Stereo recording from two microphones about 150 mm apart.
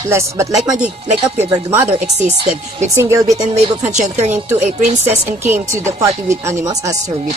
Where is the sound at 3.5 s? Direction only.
50° right (ahead or behind).